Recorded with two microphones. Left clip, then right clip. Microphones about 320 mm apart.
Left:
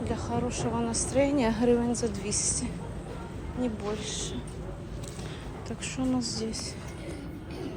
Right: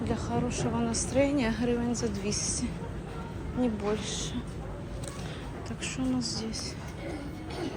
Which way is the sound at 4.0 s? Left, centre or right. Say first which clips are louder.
Even; right.